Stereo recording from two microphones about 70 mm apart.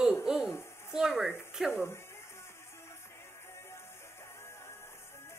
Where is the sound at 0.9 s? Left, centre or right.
Centre.